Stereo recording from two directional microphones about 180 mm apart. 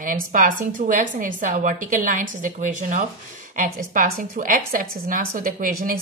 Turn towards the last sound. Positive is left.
turn(degrees=-55)  # may be behind; listen again after turning